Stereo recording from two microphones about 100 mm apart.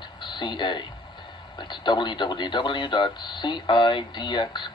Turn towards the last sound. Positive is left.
turn(degrees=50)  # may be behind; listen again after turning